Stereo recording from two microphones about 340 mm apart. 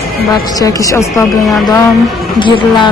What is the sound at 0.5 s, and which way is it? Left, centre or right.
A woman's voice, centre.